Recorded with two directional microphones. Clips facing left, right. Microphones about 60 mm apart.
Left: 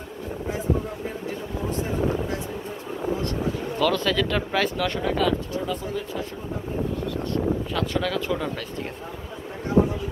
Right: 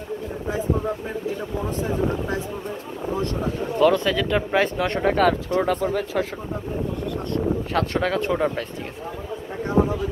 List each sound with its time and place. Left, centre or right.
3.7 s speech: right
4.8 s speech: right
7.7 s speech: right